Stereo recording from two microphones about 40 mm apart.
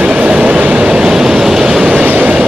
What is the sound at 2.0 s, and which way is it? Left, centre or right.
Train, right.